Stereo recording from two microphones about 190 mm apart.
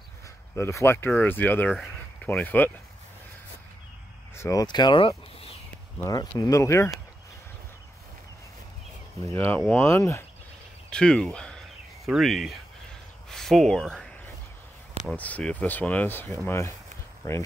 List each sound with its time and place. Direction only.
0.6 s speech: 15° left (ahead or behind)
4.4 s speech: 20° left (ahead or behind)
9.3 s speech: 15° left (ahead or behind)
13.3 s a sound: centre (ahead or behind)
15.0 s speech: 10° left (ahead or behind)